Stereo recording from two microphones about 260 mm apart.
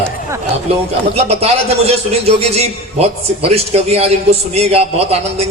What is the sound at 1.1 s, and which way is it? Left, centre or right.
A man's voice, right.